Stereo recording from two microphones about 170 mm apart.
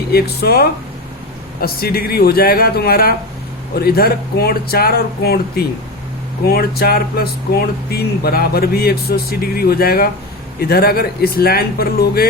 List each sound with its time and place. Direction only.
0.1 s speech: 70° left (ahead or behind)